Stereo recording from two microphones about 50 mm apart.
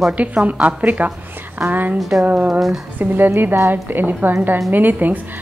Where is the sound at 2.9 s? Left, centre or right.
Right.